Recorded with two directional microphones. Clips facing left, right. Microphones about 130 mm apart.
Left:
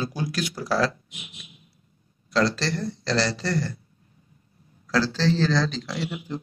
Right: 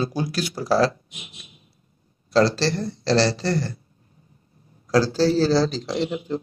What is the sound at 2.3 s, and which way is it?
Speech, 35° right (ahead or behind).